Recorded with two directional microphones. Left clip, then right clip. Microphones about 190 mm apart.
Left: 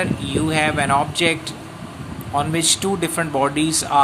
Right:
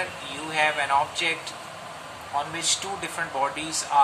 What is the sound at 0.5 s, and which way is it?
Speech, 55° left (ahead or behind).